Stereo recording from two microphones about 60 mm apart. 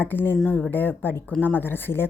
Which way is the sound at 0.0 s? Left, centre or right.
Left.